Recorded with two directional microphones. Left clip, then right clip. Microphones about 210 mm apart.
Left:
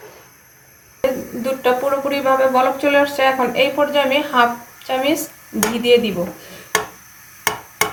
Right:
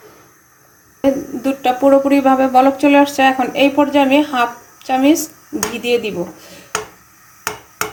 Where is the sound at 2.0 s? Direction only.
50° right (ahead or behind).